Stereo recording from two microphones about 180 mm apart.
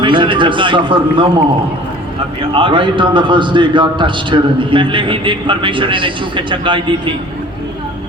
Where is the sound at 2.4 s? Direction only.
30° right (ahead or behind).